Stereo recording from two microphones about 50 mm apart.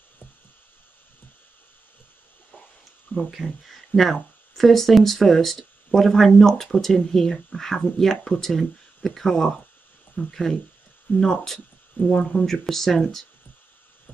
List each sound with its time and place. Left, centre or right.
3.1 s a sound: left
3.4 s speech: centre
12.0 s speech: left
12.3 s speech: centre